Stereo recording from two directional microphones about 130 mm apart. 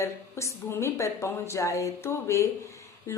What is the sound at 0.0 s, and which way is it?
A woman's voice, 20° left (ahead or behind).